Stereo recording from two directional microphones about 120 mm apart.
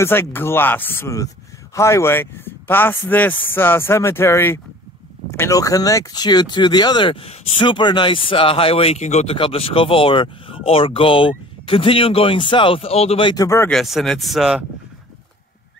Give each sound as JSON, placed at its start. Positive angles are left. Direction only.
{"t": 0.0, "sound": "a man's voice", "side_deg": 20}
{"t": 9.4, "sound": "speech", "side_deg": 50}
{"t": 13.3, "sound": "speech", "side_deg": 30}
{"t": 13.7, "sound": "speech", "side_deg": 0}